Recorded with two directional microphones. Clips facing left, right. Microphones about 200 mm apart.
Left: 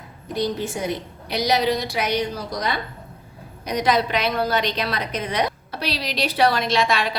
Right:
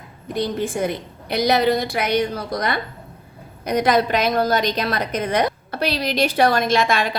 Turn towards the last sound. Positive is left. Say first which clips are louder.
# right 2 dB
turn(degrees=-50)  # may be behind; listen again after turning